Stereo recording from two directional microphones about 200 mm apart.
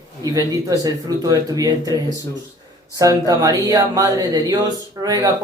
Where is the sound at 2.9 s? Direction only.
15° right (ahead or behind).